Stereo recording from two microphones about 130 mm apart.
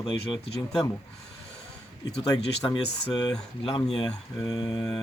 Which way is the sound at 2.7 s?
30° left (ahead or behind).